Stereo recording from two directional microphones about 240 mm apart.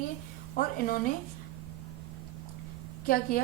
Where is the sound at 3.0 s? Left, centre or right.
Left.